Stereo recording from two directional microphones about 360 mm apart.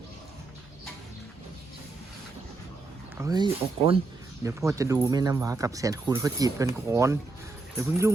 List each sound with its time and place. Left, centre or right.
3.2 s speech: centre